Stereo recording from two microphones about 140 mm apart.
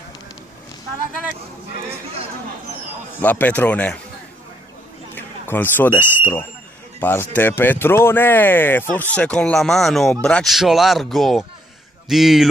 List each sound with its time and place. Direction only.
3.2 s speech: 10° left (ahead or behind)
5.1 s a sound: 15° left (ahead or behind)
7.0 s speech: 15° left (ahead or behind); by 12.4 s centre (ahead or behind)